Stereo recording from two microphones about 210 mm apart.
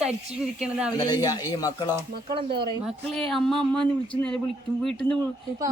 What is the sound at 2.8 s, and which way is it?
Speech, centre (ahead or behind).